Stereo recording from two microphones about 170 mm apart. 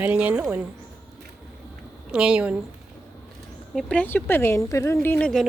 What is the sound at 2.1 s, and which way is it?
Speech, 5° right (ahead or behind).